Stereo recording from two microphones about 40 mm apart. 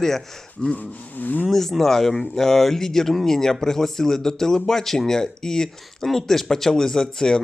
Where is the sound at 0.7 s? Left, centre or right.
Left.